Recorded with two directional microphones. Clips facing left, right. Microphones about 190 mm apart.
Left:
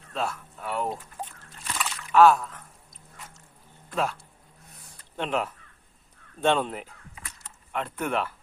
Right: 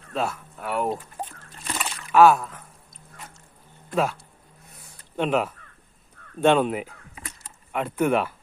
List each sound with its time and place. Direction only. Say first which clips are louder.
0.1 s speech: right 3 dB; 5° right (ahead or behind)
1.6 s a sound: right 2 dB; 25° right (ahead or behind)
2.1 s speech: right 2 dB; 5° right (ahead or behind)
3.9 s speech: right 4 dB; 5° right (ahead or behind)